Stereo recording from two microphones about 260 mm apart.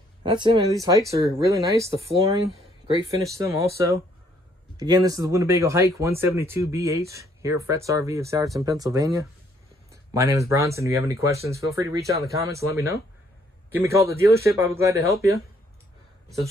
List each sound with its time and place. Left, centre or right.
0.2 s speech: centre
3.3 s speech: centre